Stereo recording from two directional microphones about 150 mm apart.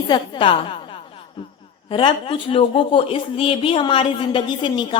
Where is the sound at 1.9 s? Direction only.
35° left (ahead or behind).